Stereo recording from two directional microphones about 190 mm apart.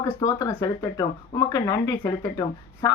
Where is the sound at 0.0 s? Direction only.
15° left (ahead or behind).